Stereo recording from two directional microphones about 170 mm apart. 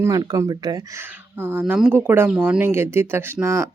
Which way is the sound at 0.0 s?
20° right (ahead or behind).